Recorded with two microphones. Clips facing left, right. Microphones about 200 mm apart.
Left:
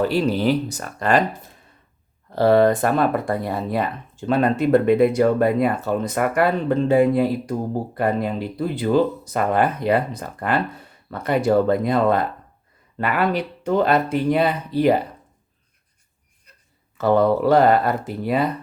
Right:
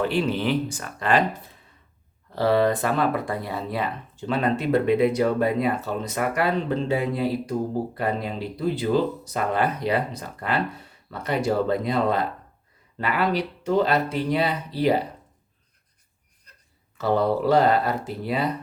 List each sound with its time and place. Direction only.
0.0 s speech: 40° left (ahead or behind)
2.3 s speech: 50° left (ahead or behind)
17.0 s speech: 55° left (ahead or behind)